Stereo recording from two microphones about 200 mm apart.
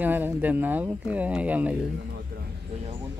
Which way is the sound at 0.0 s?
10° right (ahead or behind).